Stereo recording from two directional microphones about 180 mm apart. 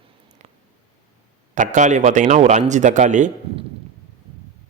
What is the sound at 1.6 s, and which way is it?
A man's voice, 40° right (ahead or behind).